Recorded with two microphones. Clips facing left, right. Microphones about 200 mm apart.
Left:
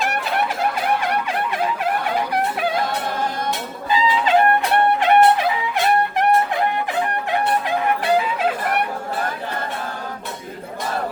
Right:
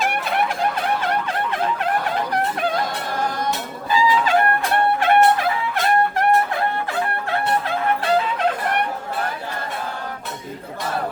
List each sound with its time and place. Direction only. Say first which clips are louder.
1.3 s turkey: left 1 dB; 10° left (ahead or behind)
3.8 s music: right 1 dB; 20° left (ahead or behind)